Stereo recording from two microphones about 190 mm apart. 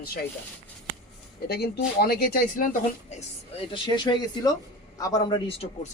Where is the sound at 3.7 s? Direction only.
25° left (ahead or behind).